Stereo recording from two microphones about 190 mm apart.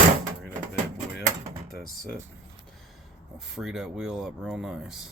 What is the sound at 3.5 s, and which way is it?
Speech, 5° right (ahead or behind).